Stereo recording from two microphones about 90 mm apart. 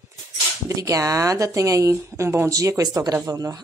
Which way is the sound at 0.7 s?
40° right (ahead or behind).